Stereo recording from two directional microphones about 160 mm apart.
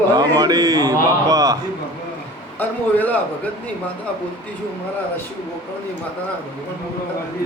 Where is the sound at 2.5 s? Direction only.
10° left (ahead or behind).